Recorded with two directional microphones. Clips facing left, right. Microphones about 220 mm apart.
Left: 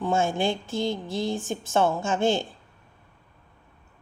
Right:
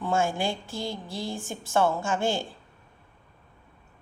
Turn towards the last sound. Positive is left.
turn(degrees=20)  # may be behind; listen again after turning